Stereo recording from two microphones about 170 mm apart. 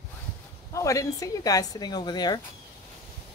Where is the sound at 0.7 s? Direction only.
20° left (ahead or behind).